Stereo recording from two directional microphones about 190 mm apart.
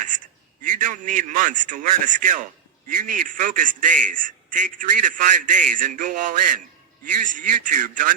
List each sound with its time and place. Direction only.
0.6 s a man's voice: 45° right (ahead or behind)